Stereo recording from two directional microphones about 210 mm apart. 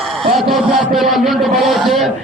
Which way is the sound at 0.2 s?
Centre (ahead or behind).